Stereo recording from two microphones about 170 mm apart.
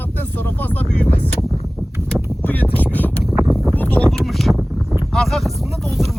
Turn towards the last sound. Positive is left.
turn(degrees=0)  # may be behind; listen again after turning